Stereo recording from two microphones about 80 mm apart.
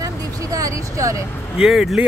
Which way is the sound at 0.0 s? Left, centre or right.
Right.